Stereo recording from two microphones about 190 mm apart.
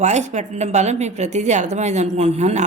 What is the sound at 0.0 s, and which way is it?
A woman's voice, 40° right (ahead or behind).